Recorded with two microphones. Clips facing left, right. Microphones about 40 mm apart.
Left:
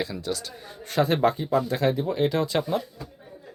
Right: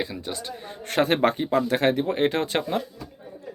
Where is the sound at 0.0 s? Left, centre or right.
Right.